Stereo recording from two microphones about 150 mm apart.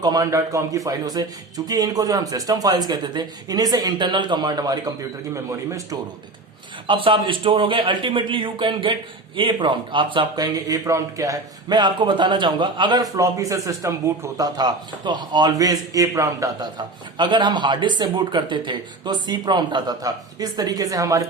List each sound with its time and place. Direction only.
0.0 s a man's voice: 25° right (ahead or behind)
6.8 s a man's voice: 35° right (ahead or behind)